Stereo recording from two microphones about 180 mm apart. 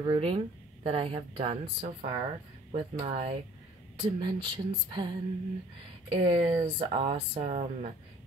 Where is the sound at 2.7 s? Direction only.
35° right (ahead or behind).